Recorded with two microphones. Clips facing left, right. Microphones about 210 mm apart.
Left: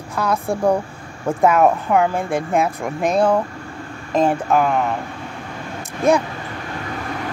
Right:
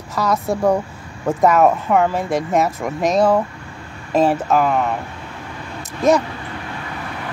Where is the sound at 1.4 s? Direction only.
Centre (ahead or behind).